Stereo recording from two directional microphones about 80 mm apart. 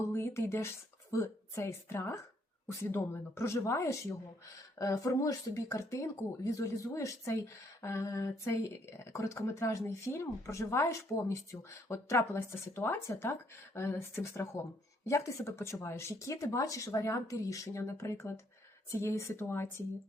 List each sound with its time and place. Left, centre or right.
0.0 s speech: left